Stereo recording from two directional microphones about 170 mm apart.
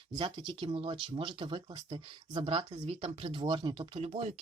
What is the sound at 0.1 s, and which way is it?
Speech, 25° right (ahead or behind).